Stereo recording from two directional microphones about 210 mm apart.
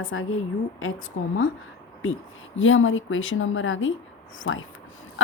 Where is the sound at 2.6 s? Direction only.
65° left (ahead or behind).